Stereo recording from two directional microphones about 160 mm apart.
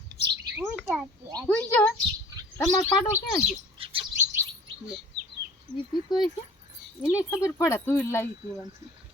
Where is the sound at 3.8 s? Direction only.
35° right (ahead or behind).